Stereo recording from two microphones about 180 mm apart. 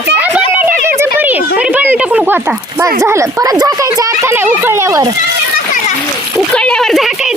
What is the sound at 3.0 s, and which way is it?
Speech, 15° right (ahead or behind).